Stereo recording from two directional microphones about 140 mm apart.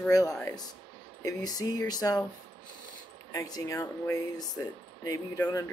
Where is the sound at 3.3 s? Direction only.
25° left (ahead or behind).